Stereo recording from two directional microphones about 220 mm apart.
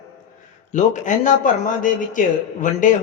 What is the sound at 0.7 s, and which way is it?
Speech, 35° left (ahead or behind).